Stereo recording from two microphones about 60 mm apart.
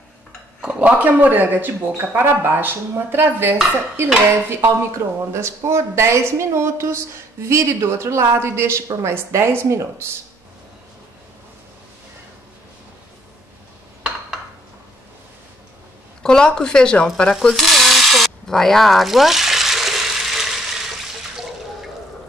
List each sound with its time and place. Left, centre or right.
0.7 s a man's voice: right
1.8 s speech: right
4.5 s speech: right
16.2 s a sound: centre